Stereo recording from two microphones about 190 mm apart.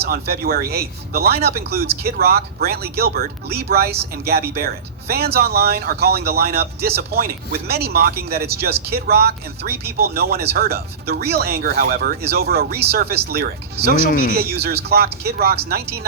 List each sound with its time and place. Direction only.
0.0 s speech: 55° right (ahead or behind)
14.1 s speech: 45° left (ahead or behind)
14.3 s speech: 55° right (ahead or behind)